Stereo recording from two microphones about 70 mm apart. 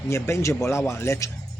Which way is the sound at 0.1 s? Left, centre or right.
Left.